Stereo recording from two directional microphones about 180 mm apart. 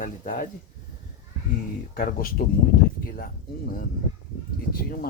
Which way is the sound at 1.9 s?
55° left (ahead or behind).